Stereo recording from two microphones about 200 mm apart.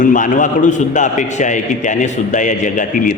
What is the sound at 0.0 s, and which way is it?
A man's voice, 40° left (ahead or behind).